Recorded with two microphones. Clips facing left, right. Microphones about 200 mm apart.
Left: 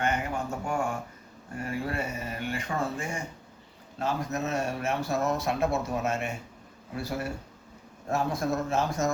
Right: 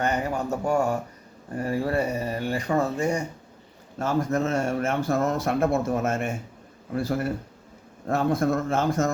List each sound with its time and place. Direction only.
0.0 s a man's voice: 40° right (ahead or behind)